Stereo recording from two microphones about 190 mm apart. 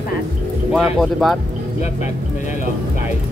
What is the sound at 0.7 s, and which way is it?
Speech, centre (ahead or behind).